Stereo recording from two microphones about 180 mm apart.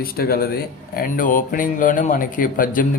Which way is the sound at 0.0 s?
55° left (ahead or behind).